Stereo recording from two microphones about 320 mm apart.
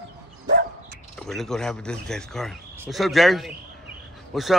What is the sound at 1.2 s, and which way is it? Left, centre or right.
A man's voice, centre.